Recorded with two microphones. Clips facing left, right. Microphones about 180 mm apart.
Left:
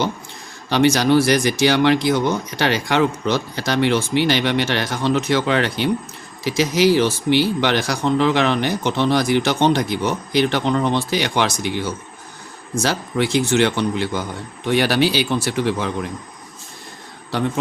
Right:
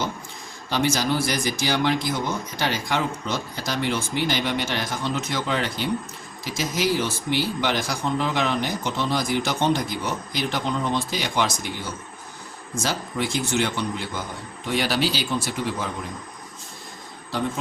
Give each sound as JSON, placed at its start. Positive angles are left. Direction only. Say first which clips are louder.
{"t": 0.7, "sound": "speech", "louder": "left 8 dB", "side_deg": 70}
{"t": 14.7, "sound": "speech", "louder": "left 6 dB", "side_deg": 65}
{"t": 17.3, "sound": "speech", "louder": "left 5 dB", "side_deg": 75}